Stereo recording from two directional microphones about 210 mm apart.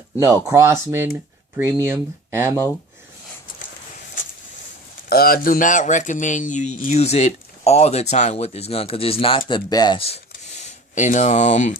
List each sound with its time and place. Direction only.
0.2 s speech: 15° right (ahead or behind)
5.0 s speech: 45° left (ahead or behind)